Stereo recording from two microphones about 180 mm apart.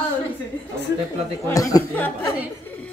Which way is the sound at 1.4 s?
20° left (ahead or behind).